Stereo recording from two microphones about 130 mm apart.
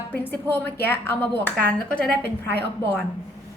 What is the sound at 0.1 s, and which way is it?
A woman's voice, 15° left (ahead or behind).